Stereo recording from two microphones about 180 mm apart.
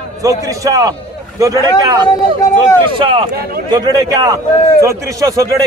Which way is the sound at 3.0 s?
30° right (ahead or behind).